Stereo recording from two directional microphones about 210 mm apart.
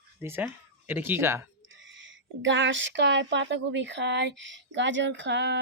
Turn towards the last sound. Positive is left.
turn(degrees=-55)  # may be behind; listen again after turning